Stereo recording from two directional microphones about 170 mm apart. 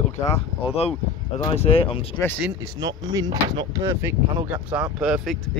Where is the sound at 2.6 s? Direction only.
20° right (ahead or behind).